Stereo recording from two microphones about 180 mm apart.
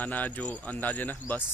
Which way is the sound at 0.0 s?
10° left (ahead or behind).